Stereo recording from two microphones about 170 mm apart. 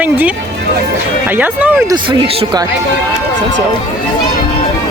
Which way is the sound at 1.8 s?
25° right (ahead or behind).